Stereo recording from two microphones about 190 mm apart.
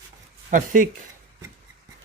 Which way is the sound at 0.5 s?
45° right (ahead or behind).